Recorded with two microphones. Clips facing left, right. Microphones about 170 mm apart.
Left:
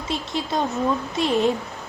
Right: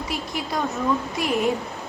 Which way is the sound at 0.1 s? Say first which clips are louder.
Left 5 dB; 25° left (ahead or behind).